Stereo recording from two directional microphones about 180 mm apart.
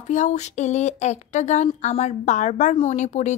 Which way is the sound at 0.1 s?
40° left (ahead or behind).